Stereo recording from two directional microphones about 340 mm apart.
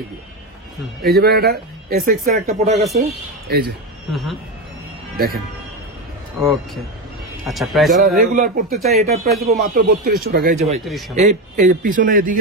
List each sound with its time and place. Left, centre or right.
1.0 s speech: right
4.1 s speech: centre
5.1 s speech: right
6.4 s speech: centre
8.0 s speech: right
8.7 s speech: centre
9.0 s speech: centre
10.9 s speech: centre
11.1 s speech: right